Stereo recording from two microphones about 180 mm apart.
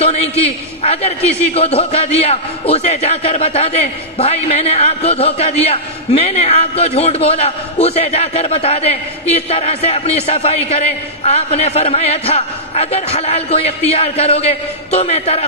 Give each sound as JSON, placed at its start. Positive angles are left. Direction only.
{"t": 0.0, "sound": "speech", "side_deg": 35}